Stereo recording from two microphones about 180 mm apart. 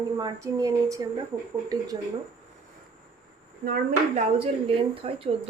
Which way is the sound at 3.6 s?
55° right (ahead or behind).